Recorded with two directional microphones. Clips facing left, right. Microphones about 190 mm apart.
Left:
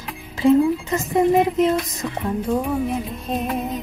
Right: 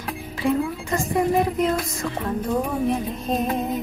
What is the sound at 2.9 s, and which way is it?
Music, 5° left (ahead or behind).